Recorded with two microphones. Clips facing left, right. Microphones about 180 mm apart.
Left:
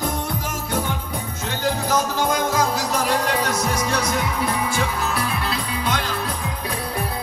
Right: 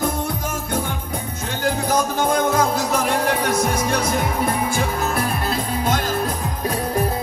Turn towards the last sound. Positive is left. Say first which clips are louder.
# right 5 dB
turn(degrees=-45)  # may be behind; listen again after turning